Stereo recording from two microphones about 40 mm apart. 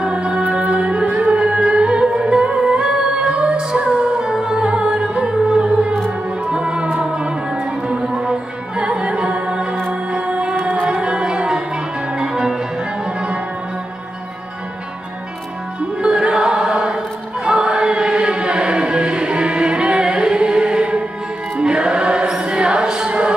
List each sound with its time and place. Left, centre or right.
0.1 s music: right
16.0 s music: right
17.5 s choir: right
21.5 s music: right